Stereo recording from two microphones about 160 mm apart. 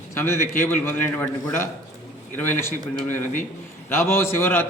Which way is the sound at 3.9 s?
15° left (ahead or behind).